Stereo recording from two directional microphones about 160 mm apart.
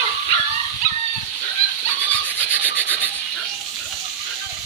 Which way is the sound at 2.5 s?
10° right (ahead or behind).